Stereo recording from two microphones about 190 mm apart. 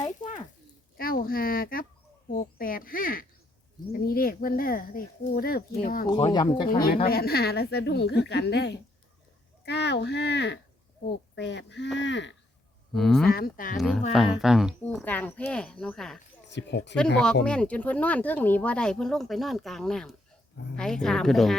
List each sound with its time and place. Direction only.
0.9 s a sound: 50° left (ahead or behind)
3.9 s speech: 50° left (ahead or behind)
6.1 s speech: 25° left (ahead or behind)
6.7 s speech: 50° left (ahead or behind); by 12.3 s 70° left (ahead or behind)
12.9 s speech: centre (ahead or behind)
13.2 s speech: 55° left (ahead or behind)
13.7 s speech: centre (ahead or behind)
14.8 s speech: 10° left (ahead or behind)
16.5 s speech: 65° left (ahead or behind)
17.4 s speech: 5° left (ahead or behind)